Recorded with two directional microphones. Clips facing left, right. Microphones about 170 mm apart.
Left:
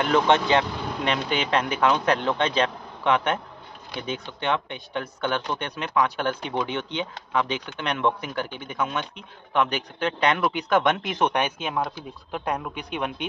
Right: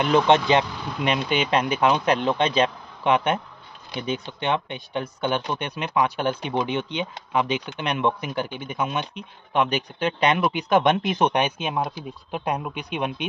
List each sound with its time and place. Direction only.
0.0 s speech: 20° right (ahead or behind)